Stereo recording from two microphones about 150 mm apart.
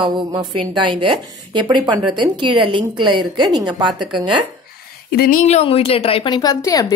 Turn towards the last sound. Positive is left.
turn(degrees=25)  # may be behind; listen again after turning